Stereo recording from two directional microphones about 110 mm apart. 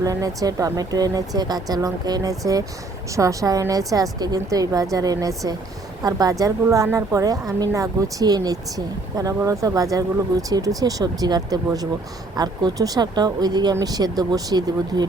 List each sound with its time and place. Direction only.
0.0 s speech: 35° right (ahead or behind)